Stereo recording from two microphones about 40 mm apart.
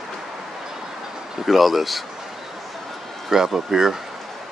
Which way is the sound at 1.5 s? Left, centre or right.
Centre.